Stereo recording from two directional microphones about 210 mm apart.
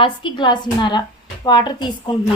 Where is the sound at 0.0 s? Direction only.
20° left (ahead or behind).